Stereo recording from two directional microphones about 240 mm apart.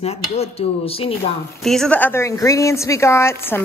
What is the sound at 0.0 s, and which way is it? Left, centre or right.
Speech, left.